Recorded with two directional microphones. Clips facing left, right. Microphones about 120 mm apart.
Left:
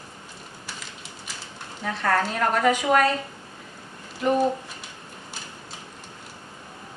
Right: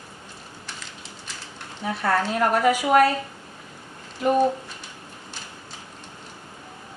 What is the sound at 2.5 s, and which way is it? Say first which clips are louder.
Speech: right 1 dB; 10° right (ahead or behind).